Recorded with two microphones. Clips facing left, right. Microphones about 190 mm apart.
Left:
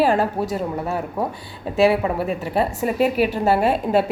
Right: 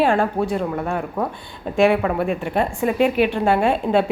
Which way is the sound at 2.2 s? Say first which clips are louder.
Right 1 dB; 35° left (ahead or behind).